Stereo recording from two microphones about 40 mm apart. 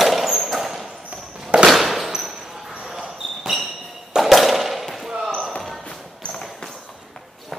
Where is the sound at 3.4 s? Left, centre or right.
Centre.